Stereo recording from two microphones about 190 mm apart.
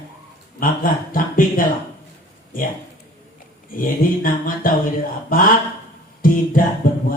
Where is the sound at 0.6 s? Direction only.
45° left (ahead or behind).